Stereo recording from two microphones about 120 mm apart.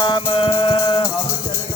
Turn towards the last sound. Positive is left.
turn(degrees=50)  # may be behind; listen again after turning